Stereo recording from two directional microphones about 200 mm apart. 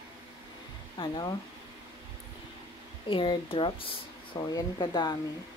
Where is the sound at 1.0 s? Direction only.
20° left (ahead or behind).